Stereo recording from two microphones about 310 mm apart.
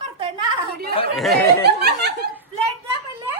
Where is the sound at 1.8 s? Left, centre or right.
Right.